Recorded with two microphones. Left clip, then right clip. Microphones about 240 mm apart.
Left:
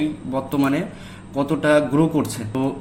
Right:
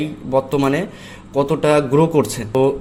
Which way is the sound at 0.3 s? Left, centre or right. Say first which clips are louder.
Right 7 dB; right.